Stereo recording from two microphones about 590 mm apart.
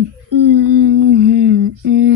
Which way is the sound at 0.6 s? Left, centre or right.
Right.